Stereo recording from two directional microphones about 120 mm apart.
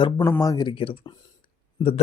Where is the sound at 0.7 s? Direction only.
50° left (ahead or behind).